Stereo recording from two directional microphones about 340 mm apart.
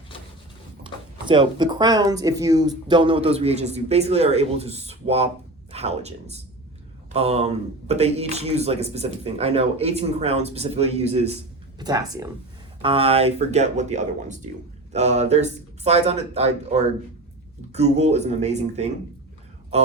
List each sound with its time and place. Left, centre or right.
1.3 s a man's voice: centre